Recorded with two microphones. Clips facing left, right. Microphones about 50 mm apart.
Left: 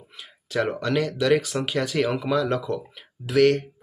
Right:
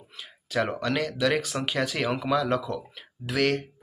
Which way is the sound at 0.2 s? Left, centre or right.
Centre.